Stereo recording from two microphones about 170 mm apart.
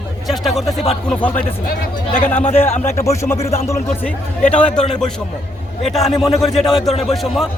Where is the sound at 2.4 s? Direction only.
40° left (ahead or behind).